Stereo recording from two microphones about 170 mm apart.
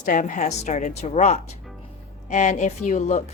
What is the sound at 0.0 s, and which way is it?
A woman's voice, 50° left (ahead or behind).